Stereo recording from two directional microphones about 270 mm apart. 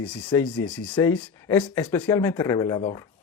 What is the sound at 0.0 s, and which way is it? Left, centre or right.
Speech, centre.